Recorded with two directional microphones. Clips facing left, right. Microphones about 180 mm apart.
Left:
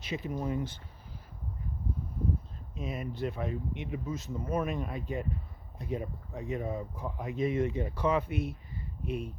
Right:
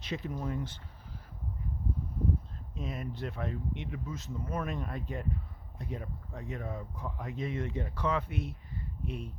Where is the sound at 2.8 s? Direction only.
5° left (ahead or behind).